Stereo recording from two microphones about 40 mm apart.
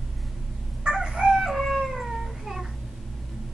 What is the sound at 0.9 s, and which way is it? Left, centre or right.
Chicken, centre.